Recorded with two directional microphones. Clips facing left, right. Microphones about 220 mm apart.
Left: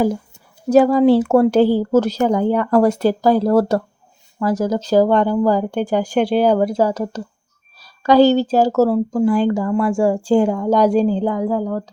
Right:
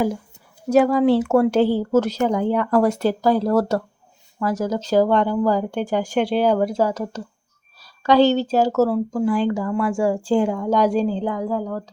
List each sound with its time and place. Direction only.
0.7 s speech: 30° left (ahead or behind)